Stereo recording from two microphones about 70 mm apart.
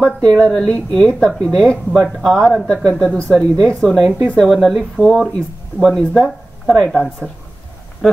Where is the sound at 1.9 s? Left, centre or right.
Centre.